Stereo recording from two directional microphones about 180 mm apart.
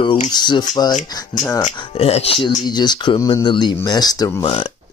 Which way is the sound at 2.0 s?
35° left (ahead or behind).